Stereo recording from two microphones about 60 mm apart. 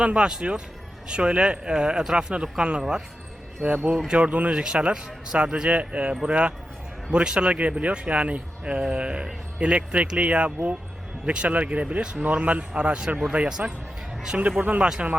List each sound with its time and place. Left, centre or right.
0.0 s speech: centre
3.9 s speech: centre
4.2 s speech: right